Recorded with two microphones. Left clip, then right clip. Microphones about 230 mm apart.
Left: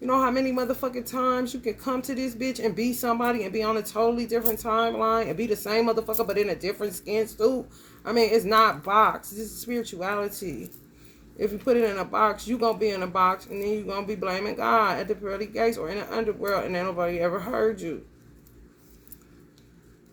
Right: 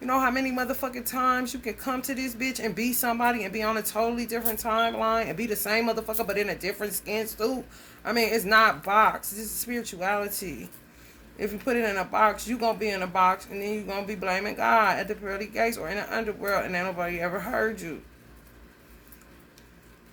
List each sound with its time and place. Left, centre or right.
0.0 s speech: centre